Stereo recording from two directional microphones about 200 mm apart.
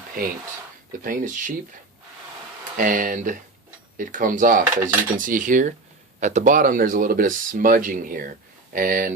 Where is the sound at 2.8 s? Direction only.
45° right (ahead or behind).